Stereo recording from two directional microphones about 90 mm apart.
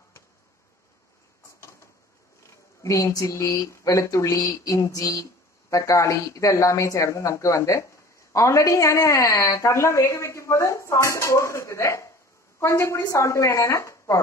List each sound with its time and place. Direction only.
2.8 s speech: 35° left (ahead or behind)